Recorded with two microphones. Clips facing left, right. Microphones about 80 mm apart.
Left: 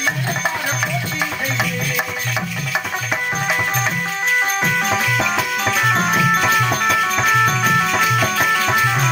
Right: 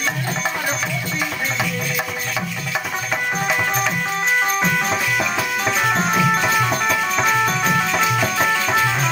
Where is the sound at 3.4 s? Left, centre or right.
Centre.